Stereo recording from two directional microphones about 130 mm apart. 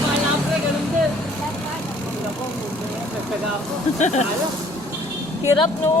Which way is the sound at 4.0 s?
60° left (ahead or behind).